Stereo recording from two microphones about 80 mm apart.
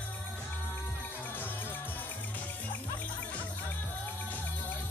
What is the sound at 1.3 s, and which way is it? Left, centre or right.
Music, left.